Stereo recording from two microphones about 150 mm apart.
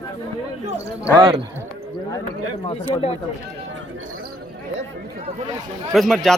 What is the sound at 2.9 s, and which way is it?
Speech, 40° left (ahead or behind).